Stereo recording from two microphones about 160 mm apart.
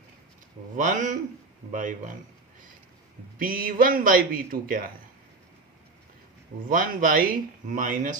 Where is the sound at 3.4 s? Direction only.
60° right (ahead or behind).